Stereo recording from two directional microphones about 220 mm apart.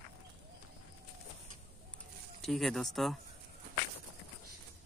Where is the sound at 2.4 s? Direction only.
Centre (ahead or behind).